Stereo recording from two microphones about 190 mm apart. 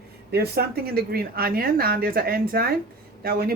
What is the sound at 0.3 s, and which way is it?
Speech, 55° right (ahead or behind).